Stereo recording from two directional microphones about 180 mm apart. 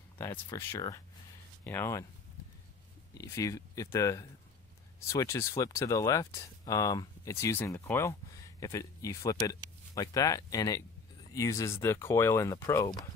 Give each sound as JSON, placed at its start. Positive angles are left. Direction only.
{"t": 0.2, "sound": "speech", "side_deg": 15}
{"t": 3.2, "sound": "speech", "side_deg": 15}